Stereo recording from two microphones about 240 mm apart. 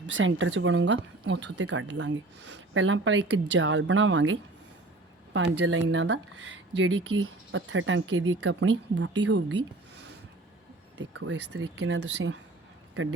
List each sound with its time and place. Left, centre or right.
0.1 s speech: right